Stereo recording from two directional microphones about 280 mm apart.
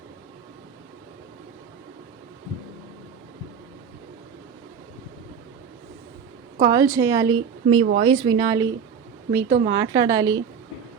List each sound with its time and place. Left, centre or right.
6.6 s speech: centre